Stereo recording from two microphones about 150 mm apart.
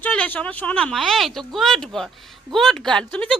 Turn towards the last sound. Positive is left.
turn(degrees=5)  # may be behind; listen again after turning